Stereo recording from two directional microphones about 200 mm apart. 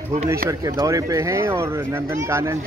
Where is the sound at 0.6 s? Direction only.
20° right (ahead or behind).